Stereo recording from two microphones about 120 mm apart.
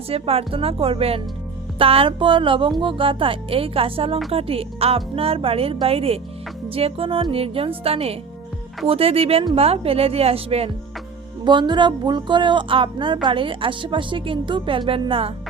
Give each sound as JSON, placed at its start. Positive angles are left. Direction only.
{"t": 0.1, "sound": "speech", "side_deg": -55}
{"t": 11.4, "sound": "a woman's voice", "side_deg": -40}